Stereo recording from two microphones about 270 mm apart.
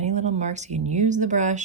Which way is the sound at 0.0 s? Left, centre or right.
Right.